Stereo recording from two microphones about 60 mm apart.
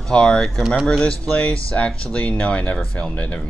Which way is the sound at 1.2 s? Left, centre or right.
Left.